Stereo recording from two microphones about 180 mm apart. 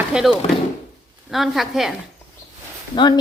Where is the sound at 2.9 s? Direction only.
25° left (ahead or behind).